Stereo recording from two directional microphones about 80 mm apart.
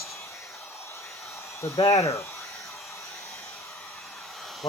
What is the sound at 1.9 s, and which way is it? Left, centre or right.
Speech, left.